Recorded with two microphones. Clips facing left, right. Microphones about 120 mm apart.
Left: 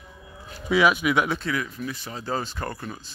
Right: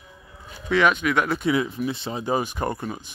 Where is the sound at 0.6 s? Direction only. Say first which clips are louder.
Even; 5° left (ahead or behind).